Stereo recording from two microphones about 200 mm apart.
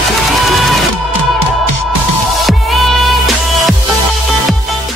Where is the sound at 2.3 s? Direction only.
Centre (ahead or behind).